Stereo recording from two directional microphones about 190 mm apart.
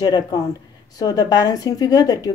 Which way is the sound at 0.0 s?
20° left (ahead or behind).